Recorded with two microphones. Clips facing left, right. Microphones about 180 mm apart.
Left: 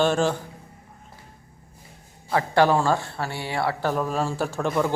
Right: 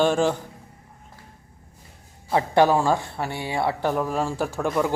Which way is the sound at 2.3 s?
20° right (ahead or behind).